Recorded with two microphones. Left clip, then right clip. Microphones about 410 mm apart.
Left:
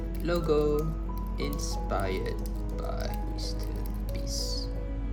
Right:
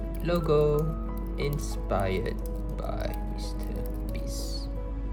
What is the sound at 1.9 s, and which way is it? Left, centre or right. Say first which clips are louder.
Speech: right 3 dB; centre.